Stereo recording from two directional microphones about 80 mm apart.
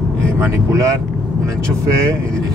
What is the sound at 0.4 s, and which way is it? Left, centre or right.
Speech, right.